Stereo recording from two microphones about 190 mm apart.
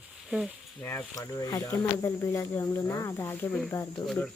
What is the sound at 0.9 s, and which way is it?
Speech, 15° left (ahead or behind).